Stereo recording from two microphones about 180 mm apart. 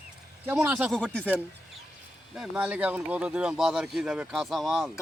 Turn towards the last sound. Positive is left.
turn(degrees=0)  # may be behind; listen again after turning